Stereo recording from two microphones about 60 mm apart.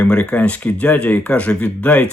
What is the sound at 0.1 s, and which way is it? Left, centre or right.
Speech, left.